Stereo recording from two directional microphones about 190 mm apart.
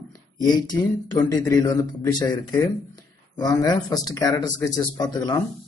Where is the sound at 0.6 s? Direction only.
20° left (ahead or behind).